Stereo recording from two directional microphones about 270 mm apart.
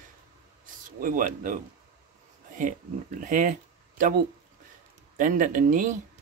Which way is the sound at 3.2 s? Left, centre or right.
Right.